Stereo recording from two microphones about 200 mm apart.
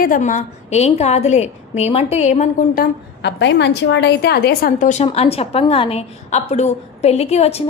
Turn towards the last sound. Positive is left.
turn(degrees=30)  # may be behind; listen again after turning